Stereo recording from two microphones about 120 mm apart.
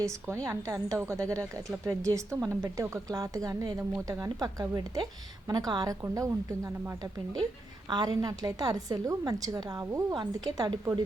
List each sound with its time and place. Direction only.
0.0 s a woman's voice: 25° right (ahead or behind)